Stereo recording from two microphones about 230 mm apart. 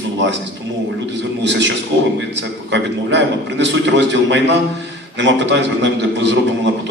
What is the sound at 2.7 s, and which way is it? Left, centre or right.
A man's voice, right.